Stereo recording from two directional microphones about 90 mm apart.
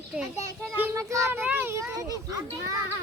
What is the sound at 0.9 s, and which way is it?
Speech, 35° right (ahead or behind).